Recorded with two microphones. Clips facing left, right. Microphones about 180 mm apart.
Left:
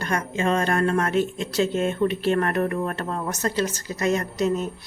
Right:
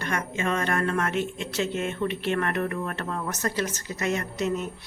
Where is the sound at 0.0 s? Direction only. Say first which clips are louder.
Left 4 dB; 35° left (ahead or behind).